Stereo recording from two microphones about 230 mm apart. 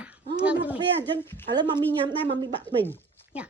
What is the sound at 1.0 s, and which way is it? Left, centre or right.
Speech, centre.